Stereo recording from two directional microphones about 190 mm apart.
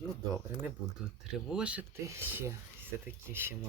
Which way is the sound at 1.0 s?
5° right (ahead or behind).